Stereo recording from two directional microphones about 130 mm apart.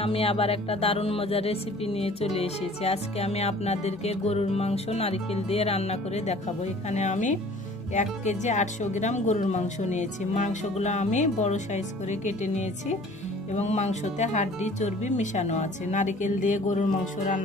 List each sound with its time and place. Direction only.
0.0 s speech: 50° left (ahead or behind); by 17.4 s 75° left (ahead or behind)